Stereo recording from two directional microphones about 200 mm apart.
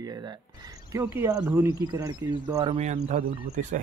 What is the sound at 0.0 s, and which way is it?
Speech, 20° right (ahead or behind).